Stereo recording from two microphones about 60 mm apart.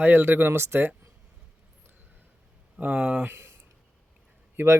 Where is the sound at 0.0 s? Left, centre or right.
Right.